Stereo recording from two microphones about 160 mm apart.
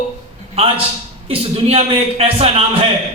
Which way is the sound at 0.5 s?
35° right (ahead or behind).